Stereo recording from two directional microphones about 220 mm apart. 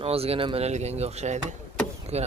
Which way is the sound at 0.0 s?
25° right (ahead or behind).